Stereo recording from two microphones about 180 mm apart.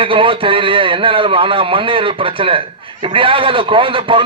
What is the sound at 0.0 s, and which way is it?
A man's voice, 30° right (ahead or behind).